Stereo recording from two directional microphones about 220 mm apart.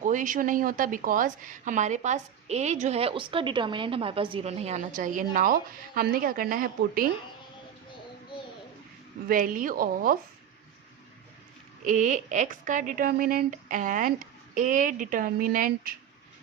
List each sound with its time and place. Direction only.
0.0 s a woman's voice: 35° right (ahead or behind)
9.3 s a woman's voice: 40° right (ahead or behind)
11.9 s a woman's voice: 35° right (ahead or behind)